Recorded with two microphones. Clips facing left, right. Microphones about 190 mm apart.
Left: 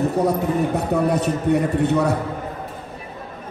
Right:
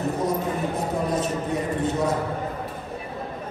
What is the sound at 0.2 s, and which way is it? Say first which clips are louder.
A man's voice: left 5 dB; 65° left (ahead or behind).